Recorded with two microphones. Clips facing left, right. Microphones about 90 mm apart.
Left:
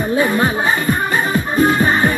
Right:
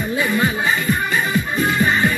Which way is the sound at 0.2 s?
35° left (ahead or behind).